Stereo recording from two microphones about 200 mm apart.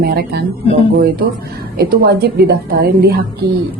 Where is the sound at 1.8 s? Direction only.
50° right (ahead or behind).